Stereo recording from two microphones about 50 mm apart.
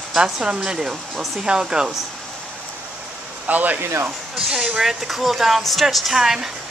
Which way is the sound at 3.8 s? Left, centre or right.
Right.